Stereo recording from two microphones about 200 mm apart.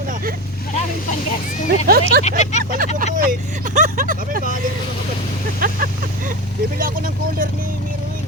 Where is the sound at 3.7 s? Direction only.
40° right (ahead or behind).